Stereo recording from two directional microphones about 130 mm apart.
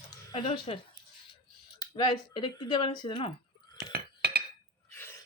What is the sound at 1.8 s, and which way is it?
Speech, 35° left (ahead or behind).